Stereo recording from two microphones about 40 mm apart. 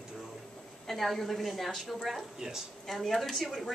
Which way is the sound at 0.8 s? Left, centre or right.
Centre.